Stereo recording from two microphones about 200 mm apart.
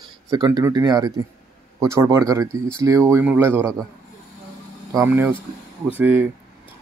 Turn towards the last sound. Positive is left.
turn(degrees=-10)  # may be behind; listen again after turning